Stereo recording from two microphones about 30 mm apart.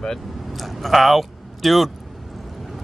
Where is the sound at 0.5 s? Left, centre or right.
Centre.